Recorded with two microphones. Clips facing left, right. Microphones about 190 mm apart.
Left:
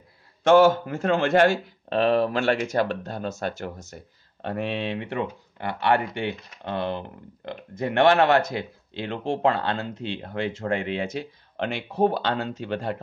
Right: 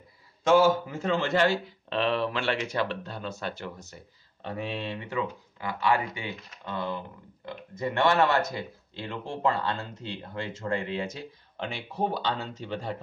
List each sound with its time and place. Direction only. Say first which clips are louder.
0.4 s speech: left 4 dB; 65° left (ahead or behind)